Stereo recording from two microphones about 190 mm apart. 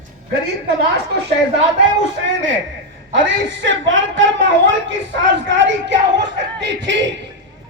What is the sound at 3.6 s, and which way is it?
Speech, 80° right.